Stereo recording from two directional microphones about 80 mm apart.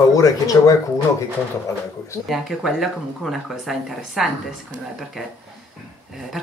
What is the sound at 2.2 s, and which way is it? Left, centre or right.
Speech, centre.